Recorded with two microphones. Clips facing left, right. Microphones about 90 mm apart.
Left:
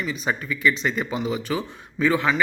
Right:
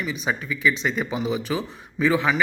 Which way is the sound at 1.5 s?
20° right (ahead or behind).